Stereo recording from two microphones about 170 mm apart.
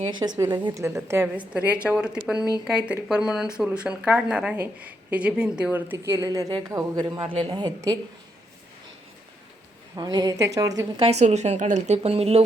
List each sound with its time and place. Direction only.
0.1 s speech: 25° right (ahead or behind)
9.9 s a woman's voice: 25° right (ahead or behind)
11.0 s speech: 40° right (ahead or behind)